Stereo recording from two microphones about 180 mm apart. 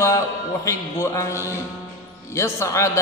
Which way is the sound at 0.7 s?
15° left (ahead or behind).